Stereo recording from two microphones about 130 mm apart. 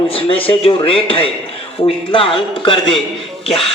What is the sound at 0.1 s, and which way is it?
A man's voice, 45° left (ahead or behind).